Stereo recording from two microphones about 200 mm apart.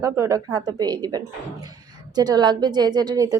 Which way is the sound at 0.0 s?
15° right (ahead or behind).